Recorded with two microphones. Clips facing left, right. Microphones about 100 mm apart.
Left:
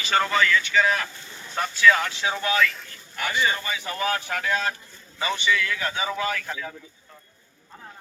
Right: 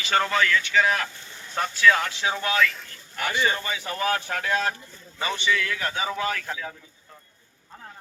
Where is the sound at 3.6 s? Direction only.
30° right (ahead or behind).